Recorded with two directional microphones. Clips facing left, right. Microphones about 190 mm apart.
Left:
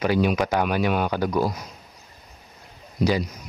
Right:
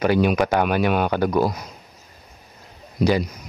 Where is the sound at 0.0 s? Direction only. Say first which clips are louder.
Right 3 dB; 60° right (ahead or behind).